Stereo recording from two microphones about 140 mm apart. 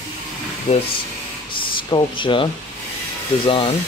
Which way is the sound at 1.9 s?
35° left (ahead or behind).